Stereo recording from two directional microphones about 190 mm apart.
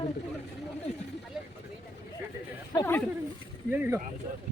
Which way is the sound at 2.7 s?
20° left (ahead or behind).